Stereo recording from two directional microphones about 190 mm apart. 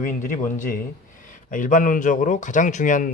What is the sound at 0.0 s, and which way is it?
A man's voice, 45° left (ahead or behind).